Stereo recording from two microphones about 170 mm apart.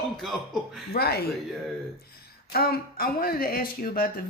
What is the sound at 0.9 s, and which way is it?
Speech, 65° left (ahead or behind).